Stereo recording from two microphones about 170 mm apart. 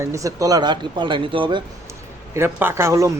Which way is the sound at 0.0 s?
20° right (ahead or behind).